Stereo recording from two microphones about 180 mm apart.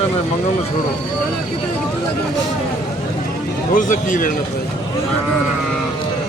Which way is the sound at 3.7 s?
45° left (ahead or behind).